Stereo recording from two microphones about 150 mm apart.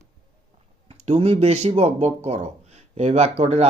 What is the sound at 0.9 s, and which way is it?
A man's voice, 45° right (ahead or behind).